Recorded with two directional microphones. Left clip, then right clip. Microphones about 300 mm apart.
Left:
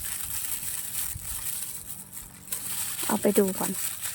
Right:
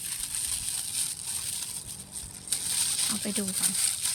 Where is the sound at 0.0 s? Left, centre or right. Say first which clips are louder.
Right 2 dB; centre.